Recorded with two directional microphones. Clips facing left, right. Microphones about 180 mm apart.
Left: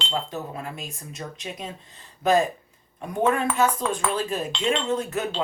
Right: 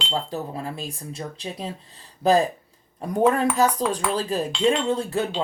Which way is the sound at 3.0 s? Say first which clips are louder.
Right 3 dB; 35° right (ahead or behind).